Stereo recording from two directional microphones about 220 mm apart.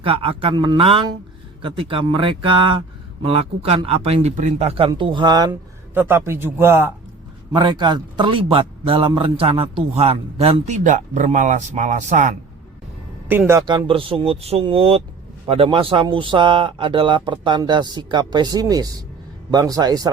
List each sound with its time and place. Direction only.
0.0 s a man's voice: 25° right (ahead or behind)
7.5 s a man's voice: 20° right (ahead or behind)
13.2 s a man's voice: 10° right (ahead or behind)